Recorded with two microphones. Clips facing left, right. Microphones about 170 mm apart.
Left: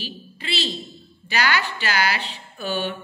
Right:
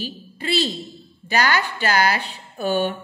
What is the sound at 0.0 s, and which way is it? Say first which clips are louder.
A woman's voice: right 5 dB; 50° right (ahead or behind).